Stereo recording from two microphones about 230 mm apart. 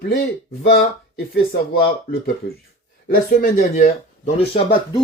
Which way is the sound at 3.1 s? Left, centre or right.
Left.